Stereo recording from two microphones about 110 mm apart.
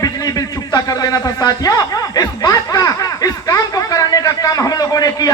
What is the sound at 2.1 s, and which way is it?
Snicker, 35° left (ahead or behind).